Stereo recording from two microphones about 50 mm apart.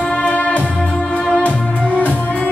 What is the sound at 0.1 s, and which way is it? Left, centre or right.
Music, left.